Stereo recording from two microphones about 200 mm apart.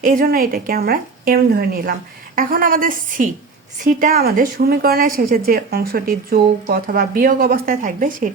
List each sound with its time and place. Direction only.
0.0 s speech: 45° right (ahead or behind)